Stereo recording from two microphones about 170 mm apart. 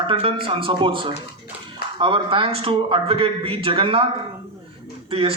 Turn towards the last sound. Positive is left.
turn(degrees=-35)  # may be behind; listen again after turning